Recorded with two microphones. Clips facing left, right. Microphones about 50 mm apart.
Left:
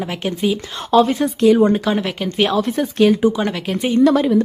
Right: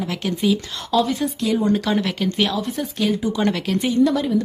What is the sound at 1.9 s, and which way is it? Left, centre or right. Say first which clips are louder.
Speech: left 1 dB; centre.